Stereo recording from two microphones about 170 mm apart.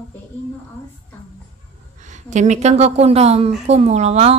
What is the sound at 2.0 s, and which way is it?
Speech, 45° right (ahead or behind).